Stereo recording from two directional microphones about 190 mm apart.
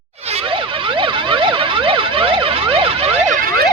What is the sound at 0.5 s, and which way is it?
Emergency vehicle, 25° right (ahead or behind).